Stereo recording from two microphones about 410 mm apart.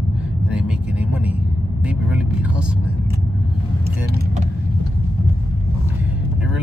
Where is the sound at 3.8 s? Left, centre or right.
Right.